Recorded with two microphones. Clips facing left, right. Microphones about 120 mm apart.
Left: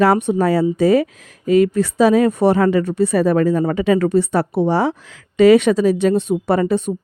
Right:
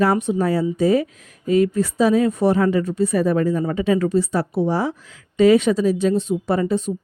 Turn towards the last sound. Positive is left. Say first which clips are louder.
# left 3 dB
turn(degrees=65)  # may be behind; listen again after turning